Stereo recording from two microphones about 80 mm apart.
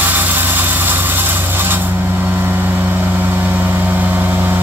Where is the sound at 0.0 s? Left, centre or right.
Right.